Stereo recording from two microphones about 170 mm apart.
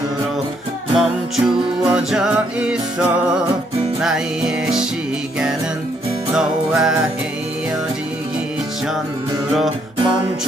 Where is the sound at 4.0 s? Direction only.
5° right (ahead or behind).